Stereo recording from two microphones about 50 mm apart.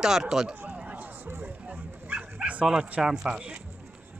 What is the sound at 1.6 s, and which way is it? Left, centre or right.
Bow-wow, right.